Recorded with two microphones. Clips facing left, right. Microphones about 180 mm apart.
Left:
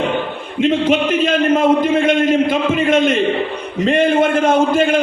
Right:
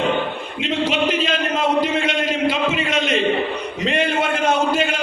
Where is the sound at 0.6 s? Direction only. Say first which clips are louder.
Left 6 dB; 50° left (ahead or behind).